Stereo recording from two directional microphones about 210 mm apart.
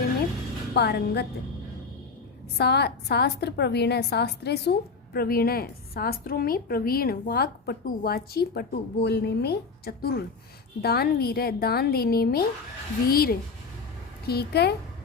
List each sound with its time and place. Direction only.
0.7 s a woman's voice: 50° left (ahead or behind)
2.6 s a woman's voice: 50° left (ahead or behind)